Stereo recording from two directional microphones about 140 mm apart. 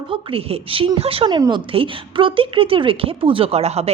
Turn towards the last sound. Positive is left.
turn(degrees=-50)  # may be behind; listen again after turning